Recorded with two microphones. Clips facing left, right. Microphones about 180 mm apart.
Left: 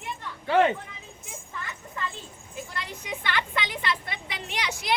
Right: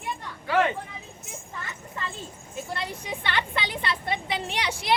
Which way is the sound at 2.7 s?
30° right (ahead or behind).